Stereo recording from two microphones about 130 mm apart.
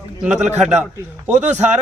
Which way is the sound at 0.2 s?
5° right (ahead or behind).